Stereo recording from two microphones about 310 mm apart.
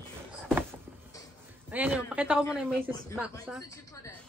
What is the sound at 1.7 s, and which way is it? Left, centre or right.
A woman's voice, centre.